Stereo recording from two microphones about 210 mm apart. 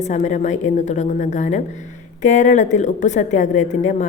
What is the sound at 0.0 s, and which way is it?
A woman's voice, 35° left (ahead or behind).